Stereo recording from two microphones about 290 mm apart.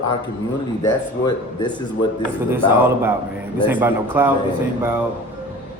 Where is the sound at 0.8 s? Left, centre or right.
Centre.